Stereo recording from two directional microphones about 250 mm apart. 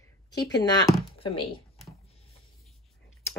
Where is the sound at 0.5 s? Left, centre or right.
Centre.